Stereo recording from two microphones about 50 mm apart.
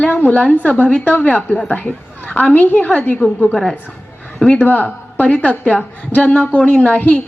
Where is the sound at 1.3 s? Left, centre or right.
Left.